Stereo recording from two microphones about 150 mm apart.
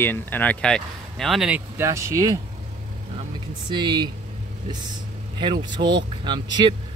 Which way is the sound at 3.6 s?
30° right (ahead or behind).